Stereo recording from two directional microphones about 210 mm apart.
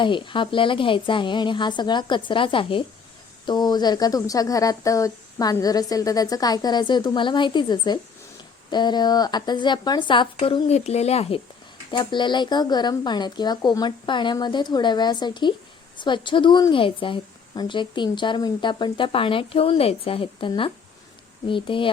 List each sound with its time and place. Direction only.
0.0 s a woman's voice: 25° left (ahead or behind)